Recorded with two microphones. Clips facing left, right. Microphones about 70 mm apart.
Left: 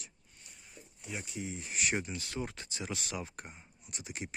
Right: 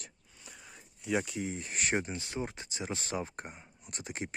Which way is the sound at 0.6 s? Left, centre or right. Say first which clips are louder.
Right 2 dB; right.